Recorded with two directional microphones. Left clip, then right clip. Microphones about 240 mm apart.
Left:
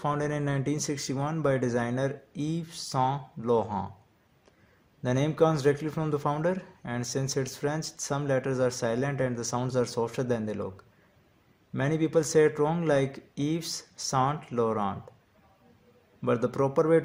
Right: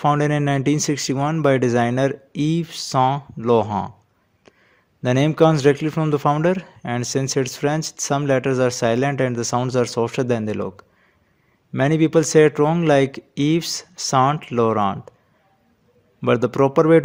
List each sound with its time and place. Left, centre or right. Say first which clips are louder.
0.0 s a man's voice: right 11 dB; right
5.0 s a man's voice: right 9 dB; right
16.2 s a man's voice: right 9 dB; right